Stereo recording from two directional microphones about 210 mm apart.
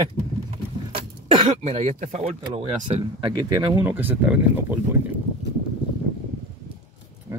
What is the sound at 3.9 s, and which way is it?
Speech, 10° right (ahead or behind).